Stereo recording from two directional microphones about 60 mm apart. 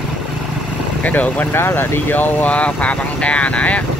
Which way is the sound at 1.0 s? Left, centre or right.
Left.